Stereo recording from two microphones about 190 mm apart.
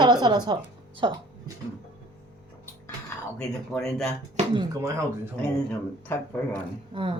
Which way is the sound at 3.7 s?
Centre (ahead or behind).